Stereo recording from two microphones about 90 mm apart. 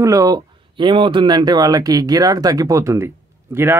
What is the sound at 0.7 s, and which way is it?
Speech, 65° right (ahead or behind).